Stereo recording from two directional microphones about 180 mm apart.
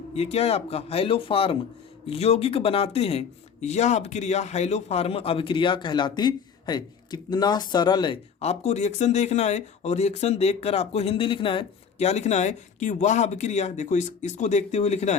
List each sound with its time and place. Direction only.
0.1 s speech: 35° left (ahead or behind)